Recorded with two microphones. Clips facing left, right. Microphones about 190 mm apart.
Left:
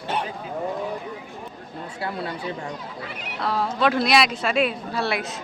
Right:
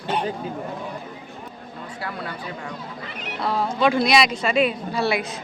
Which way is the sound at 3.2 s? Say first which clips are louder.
Right 1 dB; centre (ahead or behind).